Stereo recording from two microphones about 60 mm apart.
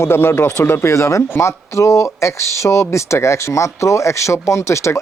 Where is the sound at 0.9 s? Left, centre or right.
Left.